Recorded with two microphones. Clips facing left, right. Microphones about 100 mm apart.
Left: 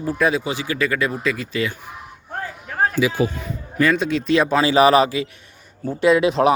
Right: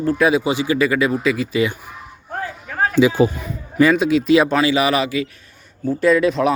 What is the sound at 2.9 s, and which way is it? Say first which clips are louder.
Speech: right 8 dB; 30° right (ahead or behind).